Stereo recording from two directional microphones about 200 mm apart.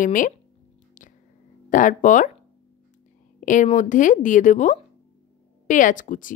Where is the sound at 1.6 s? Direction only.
40° left (ahead or behind).